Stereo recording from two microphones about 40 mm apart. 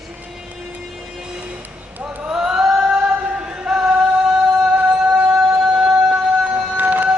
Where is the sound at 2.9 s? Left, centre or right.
Right.